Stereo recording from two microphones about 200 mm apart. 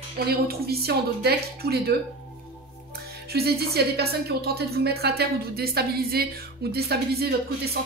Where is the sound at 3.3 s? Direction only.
50° right (ahead or behind).